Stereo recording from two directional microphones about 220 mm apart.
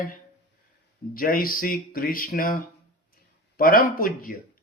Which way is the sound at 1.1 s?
40° left (ahead or behind).